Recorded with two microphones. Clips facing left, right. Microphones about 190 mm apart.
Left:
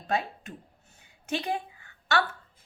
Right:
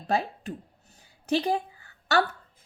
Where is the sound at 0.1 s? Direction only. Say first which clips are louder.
Right 3 dB; 35° right (ahead or behind).